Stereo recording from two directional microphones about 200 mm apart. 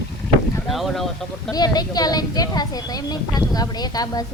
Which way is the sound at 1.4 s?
20° left (ahead or behind).